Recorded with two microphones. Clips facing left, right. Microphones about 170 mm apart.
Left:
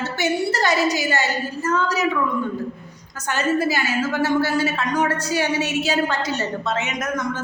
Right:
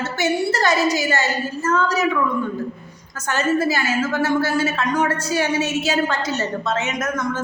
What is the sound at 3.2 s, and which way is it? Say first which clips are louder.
A woman's voice: right 1 dB; 15° left (ahead or behind).